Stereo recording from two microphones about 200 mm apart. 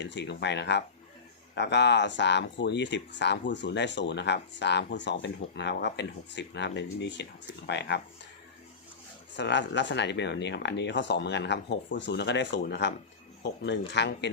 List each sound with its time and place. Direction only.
0.0 s speech: 60° left (ahead or behind)
9.3 s speech: 60° left (ahead or behind)